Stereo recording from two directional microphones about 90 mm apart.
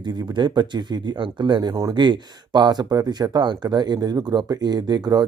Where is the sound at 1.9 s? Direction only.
55° right (ahead or behind).